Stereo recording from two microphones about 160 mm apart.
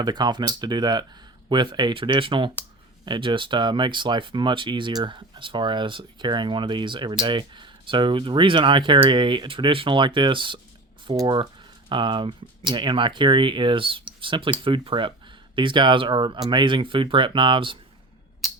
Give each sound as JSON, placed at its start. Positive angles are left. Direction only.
{"t": 0.0, "sound": "speech", "side_deg": -25}
{"t": 18.4, "sound": "music", "side_deg": 0}